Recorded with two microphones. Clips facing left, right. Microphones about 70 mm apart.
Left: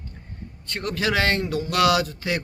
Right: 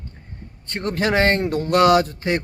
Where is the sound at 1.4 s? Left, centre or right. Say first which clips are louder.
Right 4 dB; right.